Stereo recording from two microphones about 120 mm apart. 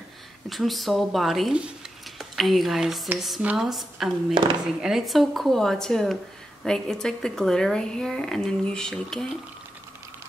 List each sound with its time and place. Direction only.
0.5 s speech: centre (ahead or behind)
4.3 s speech: 45° right (ahead or behind)
4.8 s speech: centre (ahead or behind)